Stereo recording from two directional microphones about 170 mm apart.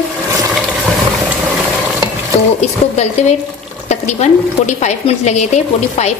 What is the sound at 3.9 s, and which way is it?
A woman's voice, 40° left (ahead or behind).